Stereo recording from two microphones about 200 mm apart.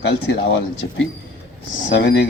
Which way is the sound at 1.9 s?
60° left (ahead or behind).